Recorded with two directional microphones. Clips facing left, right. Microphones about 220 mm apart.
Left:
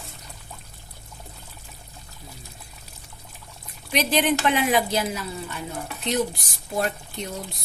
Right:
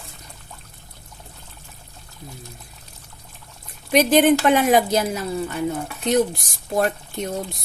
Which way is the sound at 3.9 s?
45° right (ahead or behind).